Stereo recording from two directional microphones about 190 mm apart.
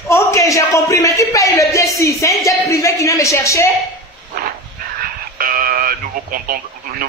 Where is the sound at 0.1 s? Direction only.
15° left (ahead or behind).